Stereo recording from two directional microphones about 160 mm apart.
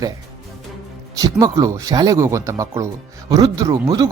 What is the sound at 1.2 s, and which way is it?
Speech, 20° right (ahead or behind).